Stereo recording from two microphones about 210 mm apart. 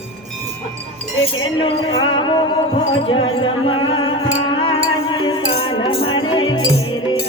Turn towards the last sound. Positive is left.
turn(degrees=20)  # may be behind; listen again after turning